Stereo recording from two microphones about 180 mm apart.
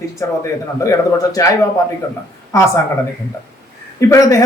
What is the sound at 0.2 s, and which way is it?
Speech, 15° left (ahead or behind).